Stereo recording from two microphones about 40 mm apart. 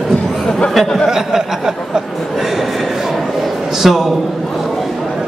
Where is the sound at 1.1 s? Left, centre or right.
Centre.